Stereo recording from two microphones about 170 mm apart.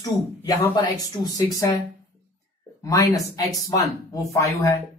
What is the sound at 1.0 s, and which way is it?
Speech, 20° left (ahead or behind).